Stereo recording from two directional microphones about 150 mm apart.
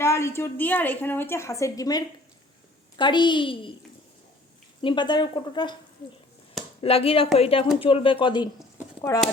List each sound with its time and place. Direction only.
0.0 s a woman's voice: 20° left (ahead or behind); by 3.8 s 35° left (ahead or behind)
4.8 s a woman's voice: 35° left (ahead or behind)
6.8 s a woman's voice: 40° left (ahead or behind)
9.0 s speech: 20° left (ahead or behind)